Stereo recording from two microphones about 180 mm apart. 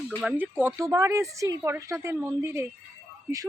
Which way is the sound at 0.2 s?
5° right (ahead or behind).